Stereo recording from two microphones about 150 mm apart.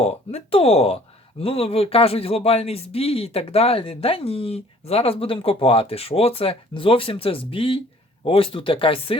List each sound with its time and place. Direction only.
0.0 s speech: 45° left (ahead or behind)